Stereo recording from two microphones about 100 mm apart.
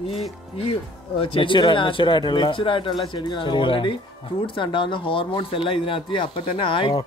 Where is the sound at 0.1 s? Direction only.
75° left (ahead or behind).